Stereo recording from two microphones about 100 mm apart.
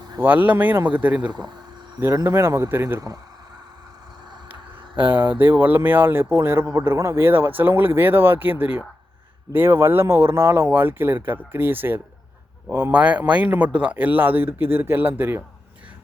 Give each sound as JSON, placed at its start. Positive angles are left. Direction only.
{"t": 0.2, "sound": "speech", "side_deg": -15}
{"t": 2.1, "sound": "speech", "side_deg": -25}
{"t": 4.9, "sound": "speech", "side_deg": -20}